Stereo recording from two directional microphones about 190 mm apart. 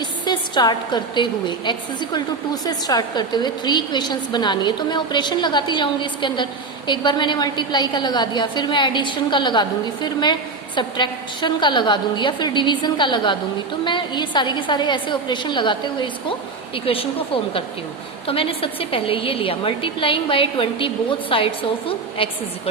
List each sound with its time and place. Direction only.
0.0 s a woman's voice: 25° left (ahead or behind)